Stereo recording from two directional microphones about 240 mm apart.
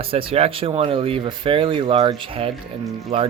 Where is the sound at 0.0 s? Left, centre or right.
Right.